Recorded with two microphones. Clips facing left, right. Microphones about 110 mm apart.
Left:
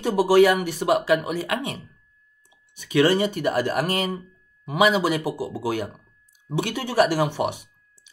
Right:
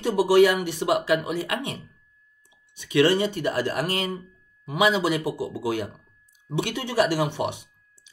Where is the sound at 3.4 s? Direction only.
55° left (ahead or behind).